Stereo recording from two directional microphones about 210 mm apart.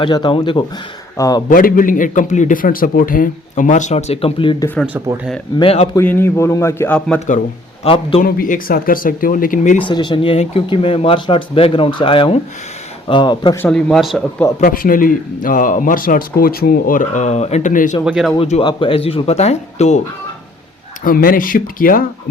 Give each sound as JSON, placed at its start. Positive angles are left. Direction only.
{"t": 0.0, "sound": "speech", "side_deg": 20}
{"t": 1.5, "sound": "speech", "side_deg": 40}
{"t": 4.9, "sound": "speech", "side_deg": -10}
{"t": 5.5, "sound": "speech", "side_deg": 25}
{"t": 6.0, "sound": "a man's voice", "side_deg": 10}
{"t": 7.9, "sound": "speech", "side_deg": 25}
{"t": 8.2, "sound": "speech", "side_deg": 40}
{"t": 9.8, "sound": "speech", "side_deg": 20}
{"t": 13.6, "sound": "speech", "side_deg": 5}
{"t": 14.6, "sound": "speech", "side_deg": 40}
{"t": 18.0, "sound": "speech", "side_deg": 0}
{"t": 18.3, "sound": "speech", "side_deg": 30}
{"t": 21.0, "sound": "speech", "side_deg": 40}